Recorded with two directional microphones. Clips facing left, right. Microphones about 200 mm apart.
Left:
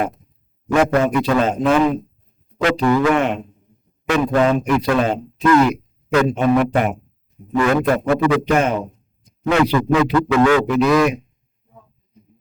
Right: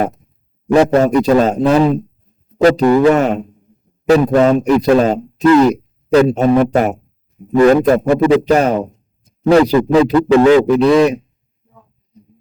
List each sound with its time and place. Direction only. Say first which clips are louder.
0.7 s a man's voice: right 5 dB; 35° right (ahead or behind)